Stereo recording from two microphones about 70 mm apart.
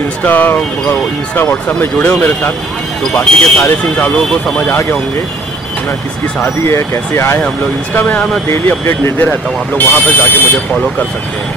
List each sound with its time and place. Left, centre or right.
0.2 s speech: left
3.3 s speech: centre
4.6 s speech: left
6.6 s speech: left
7.3 s speech: left
8.5 s speech: left
9.2 s speech: centre
9.8 s speech: left